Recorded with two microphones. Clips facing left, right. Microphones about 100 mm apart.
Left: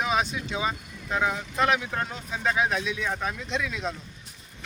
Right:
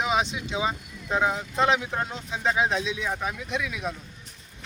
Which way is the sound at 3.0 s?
10° right (ahead or behind).